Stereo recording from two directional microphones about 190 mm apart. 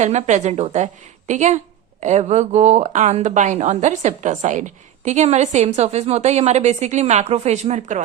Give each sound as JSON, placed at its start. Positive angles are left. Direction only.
{"t": 0.0, "sound": "a woman's voice", "side_deg": -35}